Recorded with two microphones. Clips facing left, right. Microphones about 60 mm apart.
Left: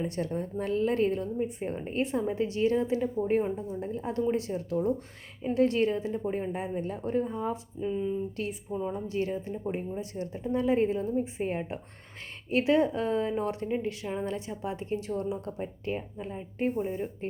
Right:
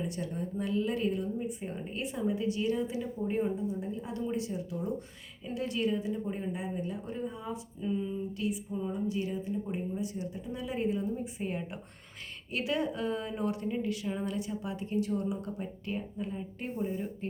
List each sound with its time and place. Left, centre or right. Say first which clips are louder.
0.2 s a woman's voice: left 5 dB; left
0.6 s a woman's voice: left 4 dB; left
7.8 s speech: left 2 dB; left
8.4 s a woman's voice: left 1 dB; left